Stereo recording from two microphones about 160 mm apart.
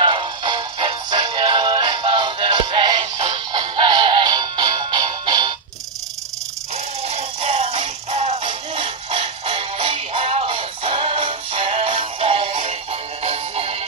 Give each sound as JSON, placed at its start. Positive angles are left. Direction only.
{"t": 0.0, "sound": "music", "side_deg": -30}
{"t": 3.0, "sound": "music", "side_deg": -45}
{"t": 3.5, "sound": "music", "side_deg": -30}
{"t": 7.1, "sound": "music", "side_deg": -40}